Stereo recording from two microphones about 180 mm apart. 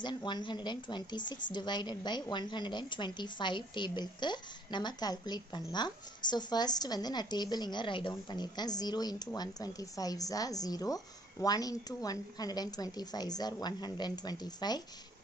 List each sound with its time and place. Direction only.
0.0 s speech: 25° left (ahead or behind)